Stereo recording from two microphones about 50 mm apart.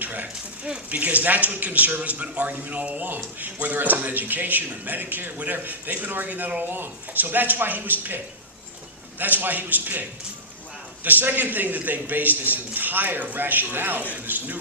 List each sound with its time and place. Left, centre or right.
0.0 s speech: right
9.1 s speech: right